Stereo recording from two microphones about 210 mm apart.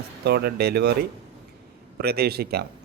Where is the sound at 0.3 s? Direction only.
50° right (ahead or behind).